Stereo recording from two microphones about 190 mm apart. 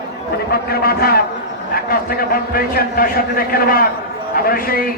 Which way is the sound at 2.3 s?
50° left (ahead or behind).